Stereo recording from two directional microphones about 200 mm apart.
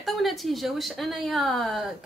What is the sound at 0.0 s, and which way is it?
A woman's voice, centre (ahead or behind).